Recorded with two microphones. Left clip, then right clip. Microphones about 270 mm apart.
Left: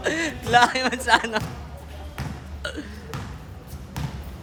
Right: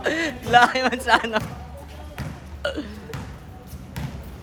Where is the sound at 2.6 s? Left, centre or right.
Centre.